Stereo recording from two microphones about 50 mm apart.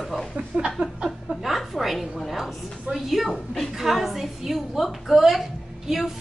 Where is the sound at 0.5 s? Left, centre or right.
Right.